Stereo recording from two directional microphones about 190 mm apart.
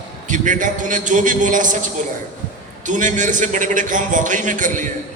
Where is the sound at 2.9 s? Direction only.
40° right (ahead or behind).